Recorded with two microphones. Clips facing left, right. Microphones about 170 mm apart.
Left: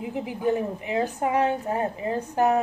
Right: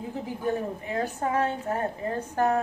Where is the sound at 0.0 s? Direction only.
15° left (ahead or behind).